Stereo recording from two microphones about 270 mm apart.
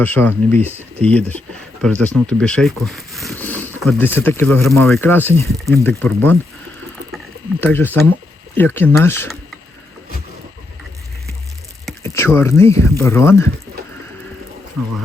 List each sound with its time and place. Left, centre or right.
0.0 s speech: centre
0.6 s speech: centre
1.8 s speech: centre
7.6 s speech: centre
11.9 s speech: centre